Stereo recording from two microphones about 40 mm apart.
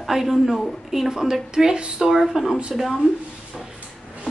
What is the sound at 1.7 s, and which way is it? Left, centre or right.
Speech, right.